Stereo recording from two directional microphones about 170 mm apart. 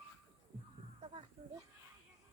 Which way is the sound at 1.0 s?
30° right (ahead or behind).